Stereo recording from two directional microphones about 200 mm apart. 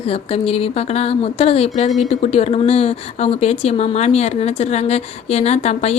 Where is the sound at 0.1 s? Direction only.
30° left (ahead or behind).